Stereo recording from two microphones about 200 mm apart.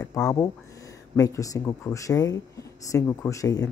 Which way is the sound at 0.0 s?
15° left (ahead or behind).